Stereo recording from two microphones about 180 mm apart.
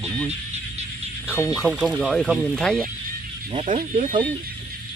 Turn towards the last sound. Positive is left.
turn(degrees=-45)  # may be behind; listen again after turning